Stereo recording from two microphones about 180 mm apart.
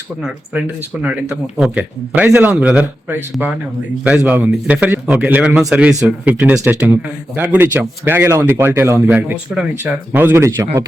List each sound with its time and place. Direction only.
1.0 s speech: 5° right (ahead or behind)